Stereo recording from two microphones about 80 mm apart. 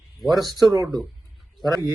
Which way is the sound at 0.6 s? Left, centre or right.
Right.